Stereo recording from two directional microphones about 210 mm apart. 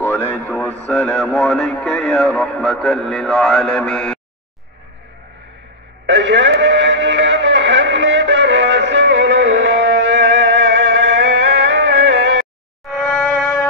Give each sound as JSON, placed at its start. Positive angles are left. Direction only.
{"t": 0.0, "sound": "radio", "side_deg": 10}
{"t": 6.0, "sound": "music", "side_deg": -55}
{"t": 12.9, "sound": "music", "side_deg": 10}